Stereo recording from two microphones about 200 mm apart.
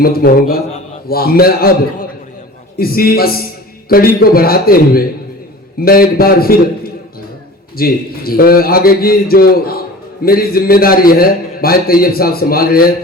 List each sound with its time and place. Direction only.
0.0 s a man's voice: 50° left (ahead or behind)
2.7 s a man's voice: 50° left (ahead or behind)